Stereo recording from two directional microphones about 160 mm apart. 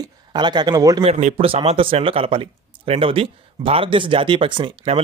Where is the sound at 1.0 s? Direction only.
45° right (ahead or behind).